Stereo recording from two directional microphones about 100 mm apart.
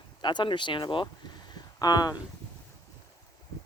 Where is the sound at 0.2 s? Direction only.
50° left (ahead or behind).